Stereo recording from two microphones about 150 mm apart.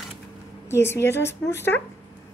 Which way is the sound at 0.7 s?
15° left (ahead or behind).